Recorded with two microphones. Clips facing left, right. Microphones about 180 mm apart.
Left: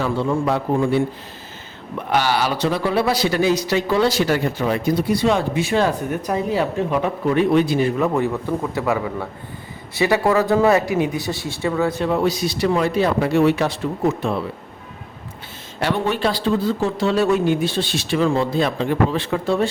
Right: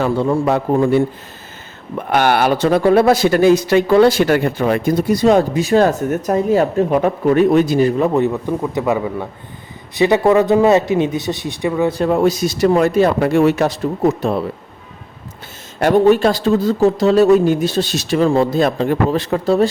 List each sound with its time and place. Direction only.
0.0 s speech: 50° right (ahead or behind)
2.0 s speech: 55° right (ahead or behind); by 11.9 s 15° right (ahead or behind)
11.9 s speech: 40° right (ahead or behind)
15.8 s speech: 45° right (ahead or behind)